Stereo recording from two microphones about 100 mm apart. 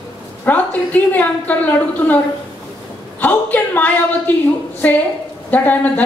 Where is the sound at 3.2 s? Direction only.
15° left (ahead or behind).